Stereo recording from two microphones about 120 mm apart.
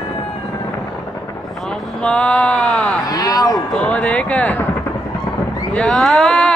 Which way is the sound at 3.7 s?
10° left (ahead or behind).